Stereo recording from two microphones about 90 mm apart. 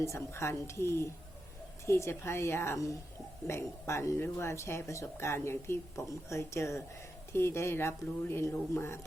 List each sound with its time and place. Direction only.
0.0 s a woman's voice: 30° left (ahead or behind)